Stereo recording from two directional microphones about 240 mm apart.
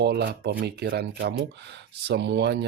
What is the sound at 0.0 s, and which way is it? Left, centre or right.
Speech, right.